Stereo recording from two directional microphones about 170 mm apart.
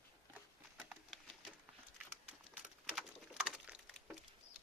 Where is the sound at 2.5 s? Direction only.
5° right (ahead or behind).